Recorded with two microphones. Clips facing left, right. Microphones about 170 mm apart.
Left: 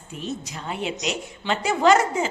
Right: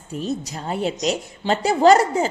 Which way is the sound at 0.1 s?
35° right (ahead or behind).